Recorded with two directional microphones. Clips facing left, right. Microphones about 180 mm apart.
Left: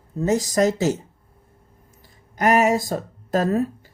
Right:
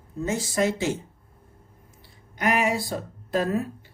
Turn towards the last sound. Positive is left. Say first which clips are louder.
# left 4 dB
turn(degrees=40)  # may be behind; listen again after turning